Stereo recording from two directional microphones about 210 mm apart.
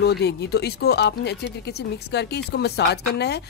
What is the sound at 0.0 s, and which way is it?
Speech, 50° left (ahead or behind).